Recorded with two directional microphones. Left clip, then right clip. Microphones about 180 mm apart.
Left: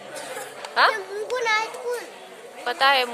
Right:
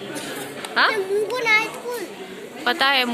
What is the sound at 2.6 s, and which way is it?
Speech, centre (ahead or behind).